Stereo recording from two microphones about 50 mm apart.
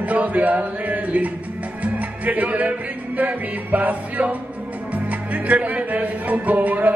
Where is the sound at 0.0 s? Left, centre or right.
Right.